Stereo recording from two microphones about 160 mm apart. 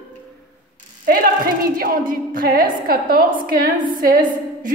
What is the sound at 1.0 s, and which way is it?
A woman's voice, 65° right (ahead or behind).